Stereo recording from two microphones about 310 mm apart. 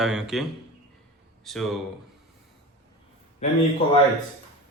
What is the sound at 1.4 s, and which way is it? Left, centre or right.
Speech, centre.